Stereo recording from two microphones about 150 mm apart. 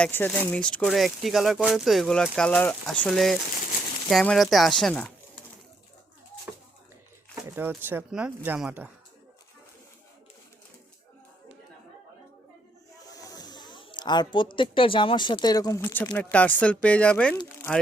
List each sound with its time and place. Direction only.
0.0 s speech: 15° left (ahead or behind)
7.4 s speech: 15° right (ahead or behind)
13.1 s speech: 25° left (ahead or behind)
15.8 s speech: 10° left (ahead or behind)